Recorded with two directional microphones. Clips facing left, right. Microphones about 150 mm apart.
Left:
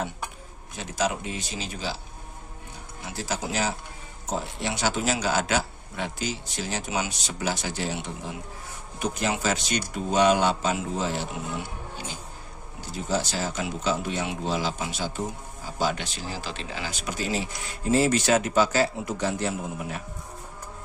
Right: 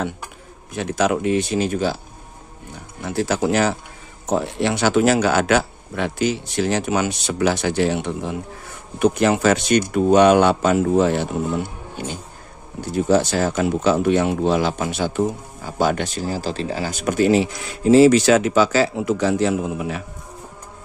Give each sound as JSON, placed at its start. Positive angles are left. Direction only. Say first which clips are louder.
{"t": 0.7, "sound": "speech", "louder": "right 8 dB", "side_deg": -65}
{"t": 3.0, "sound": "speech", "louder": "right 11 dB", "side_deg": -60}